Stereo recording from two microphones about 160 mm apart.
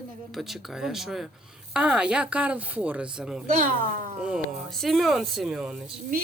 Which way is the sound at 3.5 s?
60° right (ahead or behind).